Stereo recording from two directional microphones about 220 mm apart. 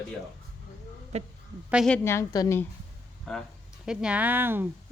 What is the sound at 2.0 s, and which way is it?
Speech, 15° left (ahead or behind).